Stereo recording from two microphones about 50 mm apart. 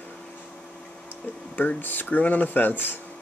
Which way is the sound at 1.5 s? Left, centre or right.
Left.